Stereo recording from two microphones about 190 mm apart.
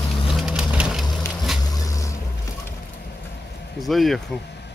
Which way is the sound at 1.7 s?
20° left (ahead or behind).